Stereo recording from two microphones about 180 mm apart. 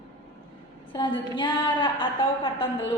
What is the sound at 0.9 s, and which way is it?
A woman's voice, 25° left (ahead or behind).